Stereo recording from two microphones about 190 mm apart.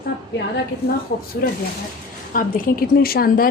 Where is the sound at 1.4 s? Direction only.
55° left (ahead or behind).